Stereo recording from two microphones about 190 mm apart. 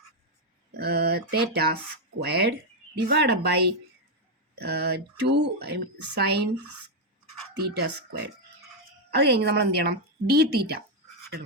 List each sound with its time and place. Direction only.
0.7 s a sound: 60° right (ahead or behind)
2.2 s speech: 60° right (ahead or behind)
7.5 s speech: 60° right (ahead or behind)
9.2 s speech: 60° right (ahead or behind)